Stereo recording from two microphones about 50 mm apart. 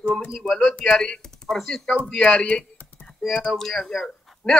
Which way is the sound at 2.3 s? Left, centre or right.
Left.